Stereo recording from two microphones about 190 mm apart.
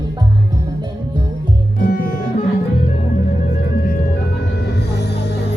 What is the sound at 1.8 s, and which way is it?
Music, 50° left (ahead or behind).